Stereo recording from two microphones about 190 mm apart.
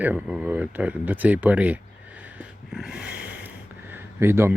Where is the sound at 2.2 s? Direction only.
10° right (ahead or behind).